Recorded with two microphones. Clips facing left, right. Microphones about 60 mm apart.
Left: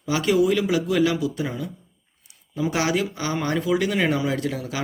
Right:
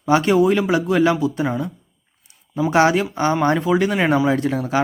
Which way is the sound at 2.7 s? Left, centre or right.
Right.